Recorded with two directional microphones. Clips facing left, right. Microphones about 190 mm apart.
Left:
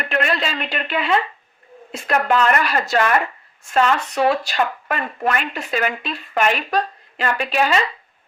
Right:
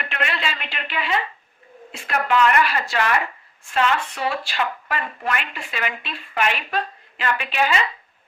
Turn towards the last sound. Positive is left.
turn(degrees=40)  # may be behind; listen again after turning